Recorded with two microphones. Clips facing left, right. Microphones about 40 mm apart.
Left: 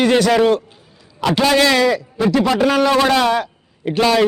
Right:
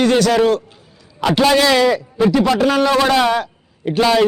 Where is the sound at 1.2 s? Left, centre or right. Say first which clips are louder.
Right 1 dB; centre.